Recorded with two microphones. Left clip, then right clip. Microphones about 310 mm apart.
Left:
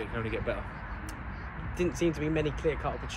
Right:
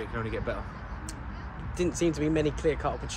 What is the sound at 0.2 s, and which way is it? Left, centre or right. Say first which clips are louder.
Speech: even; centre.